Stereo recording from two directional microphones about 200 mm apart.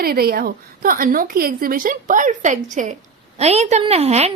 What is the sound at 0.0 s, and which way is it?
A woman's voice, 50° right (ahead or behind).